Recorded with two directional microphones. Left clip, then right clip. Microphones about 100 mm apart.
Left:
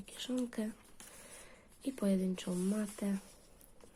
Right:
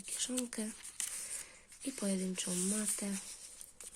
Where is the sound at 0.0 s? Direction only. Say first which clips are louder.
Even; 25° right (ahead or behind).